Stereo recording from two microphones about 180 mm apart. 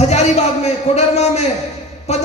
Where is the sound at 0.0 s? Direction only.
35° left (ahead or behind).